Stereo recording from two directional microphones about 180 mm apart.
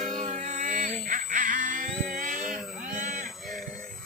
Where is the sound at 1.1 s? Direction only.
45° right (ahead or behind).